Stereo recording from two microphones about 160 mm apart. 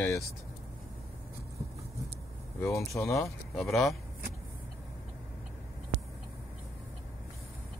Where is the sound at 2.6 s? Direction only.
20° left (ahead or behind).